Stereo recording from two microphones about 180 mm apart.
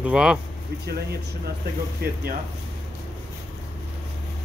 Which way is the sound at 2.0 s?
60° right (ahead or behind).